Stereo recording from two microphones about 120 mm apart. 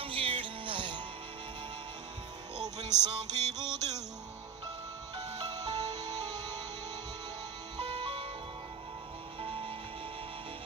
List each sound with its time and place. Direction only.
0.0 s music: 50° right (ahead or behind)
3.0 s music: 35° right (ahead or behind)
5.1 s music: 35° right (ahead or behind)
7.8 s music: 55° right (ahead or behind)
9.4 s music: 45° right (ahead or behind)